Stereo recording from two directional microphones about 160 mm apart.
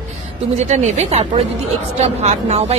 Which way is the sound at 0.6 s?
45° right (ahead or behind).